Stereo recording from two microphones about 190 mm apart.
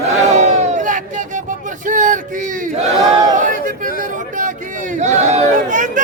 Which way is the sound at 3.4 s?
45° right (ahead or behind).